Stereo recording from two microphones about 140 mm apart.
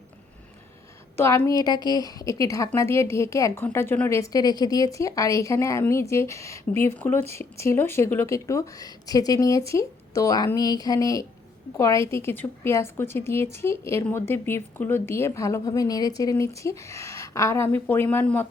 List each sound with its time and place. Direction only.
1.1 s a woman's voice: 20° left (ahead or behind)
4.2 s a woman's voice: 25° left (ahead or behind)